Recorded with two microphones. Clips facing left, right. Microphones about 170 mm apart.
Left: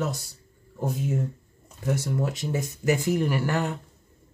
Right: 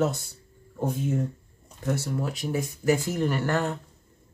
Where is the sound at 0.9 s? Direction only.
Centre (ahead or behind).